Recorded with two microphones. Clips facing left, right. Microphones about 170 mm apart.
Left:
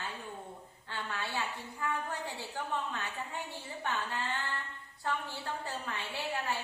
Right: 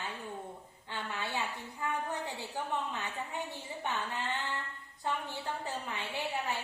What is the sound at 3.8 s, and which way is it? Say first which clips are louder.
A woman's voice: even; 20° right (ahead or behind).